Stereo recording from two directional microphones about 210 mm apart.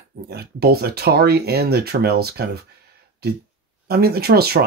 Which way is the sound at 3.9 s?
50° right (ahead or behind).